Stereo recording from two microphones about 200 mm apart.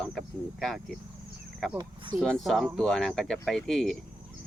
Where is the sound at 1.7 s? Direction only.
20° right (ahead or behind).